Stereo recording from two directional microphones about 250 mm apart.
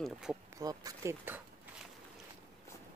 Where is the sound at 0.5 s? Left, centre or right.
Centre.